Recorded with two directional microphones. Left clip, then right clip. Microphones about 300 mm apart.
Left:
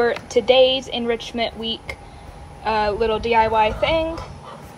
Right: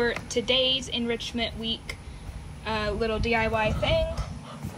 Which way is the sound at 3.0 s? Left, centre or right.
Left.